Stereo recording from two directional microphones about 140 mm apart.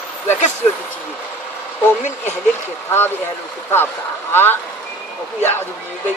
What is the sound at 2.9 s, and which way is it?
Speech, 15° left (ahead or behind).